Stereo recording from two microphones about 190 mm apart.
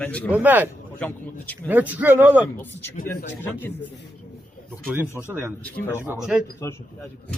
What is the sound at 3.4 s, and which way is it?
Speech, 10° left (ahead or behind).